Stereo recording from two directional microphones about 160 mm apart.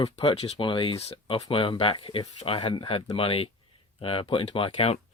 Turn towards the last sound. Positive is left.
turn(degrees=35)  # may be behind; listen again after turning